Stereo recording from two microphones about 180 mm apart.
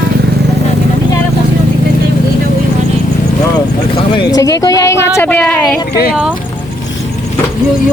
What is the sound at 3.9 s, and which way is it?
Speech, 25° left (ahead or behind).